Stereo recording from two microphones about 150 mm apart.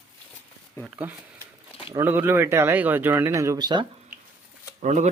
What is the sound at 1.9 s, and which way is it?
Speech, 15° right (ahead or behind).